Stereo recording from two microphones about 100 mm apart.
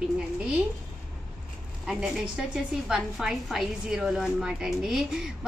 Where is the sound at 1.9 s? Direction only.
5° right (ahead or behind).